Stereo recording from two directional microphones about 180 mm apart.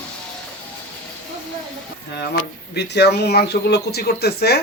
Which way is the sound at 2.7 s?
65° left (ahead or behind).